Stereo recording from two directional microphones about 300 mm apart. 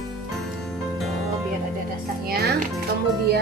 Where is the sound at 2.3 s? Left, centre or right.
Right.